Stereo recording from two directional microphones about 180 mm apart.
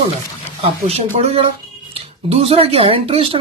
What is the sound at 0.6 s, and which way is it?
Speech, 35° right (ahead or behind).